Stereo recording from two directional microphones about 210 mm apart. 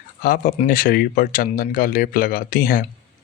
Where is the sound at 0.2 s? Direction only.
40° left (ahead or behind).